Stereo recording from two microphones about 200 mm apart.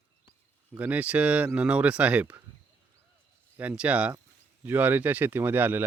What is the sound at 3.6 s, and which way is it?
Speech, 5° right (ahead or behind).